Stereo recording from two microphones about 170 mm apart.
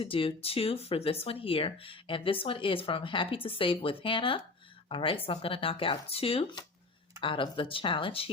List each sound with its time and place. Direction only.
0.0 s speech: 30° left (ahead or behind)